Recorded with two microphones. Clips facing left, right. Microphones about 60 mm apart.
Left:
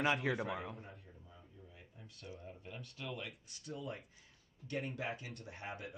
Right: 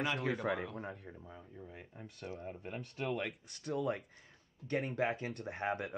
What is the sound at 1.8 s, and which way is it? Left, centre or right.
Speech, right.